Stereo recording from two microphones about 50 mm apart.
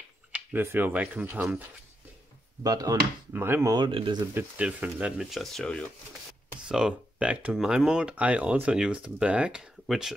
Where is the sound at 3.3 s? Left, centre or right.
Right.